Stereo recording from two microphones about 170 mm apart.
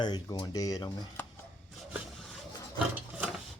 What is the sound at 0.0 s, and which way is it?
Speech, 25° left (ahead or behind).